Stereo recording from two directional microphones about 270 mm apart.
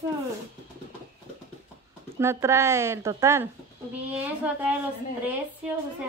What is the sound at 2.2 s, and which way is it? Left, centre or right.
A woman's voice, centre.